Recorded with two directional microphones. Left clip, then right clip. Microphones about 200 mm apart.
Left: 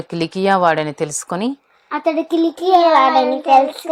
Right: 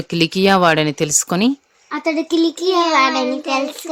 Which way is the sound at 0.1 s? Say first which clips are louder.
Right 2 dB; 50° right (ahead or behind).